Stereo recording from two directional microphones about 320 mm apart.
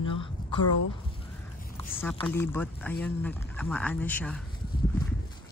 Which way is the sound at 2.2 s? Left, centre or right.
Centre.